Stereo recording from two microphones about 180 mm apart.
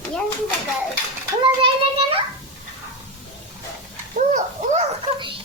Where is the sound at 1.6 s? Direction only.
30° right (ahead or behind).